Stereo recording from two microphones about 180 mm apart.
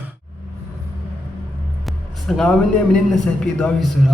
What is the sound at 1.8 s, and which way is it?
A man's voice, centre (ahead or behind).